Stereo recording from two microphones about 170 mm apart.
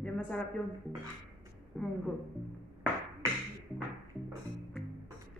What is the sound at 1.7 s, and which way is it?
Speech, 5° left (ahead or behind).